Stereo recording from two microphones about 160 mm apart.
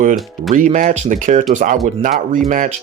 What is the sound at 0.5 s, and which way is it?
Speech, 55° right (ahead or behind).